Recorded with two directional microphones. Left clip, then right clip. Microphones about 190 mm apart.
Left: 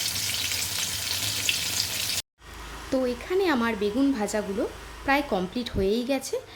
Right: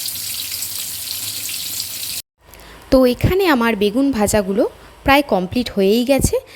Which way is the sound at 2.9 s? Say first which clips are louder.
Right 12 dB; 45° right (ahead or behind).